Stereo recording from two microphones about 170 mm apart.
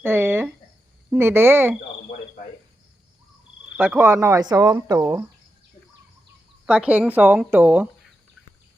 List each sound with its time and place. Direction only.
0.0 s a sound: 15° right (ahead or behind)
1.1 s speech: 15° right (ahead or behind)
3.8 s speech: 10° right (ahead or behind)
6.7 s speech: 10° right (ahead or behind)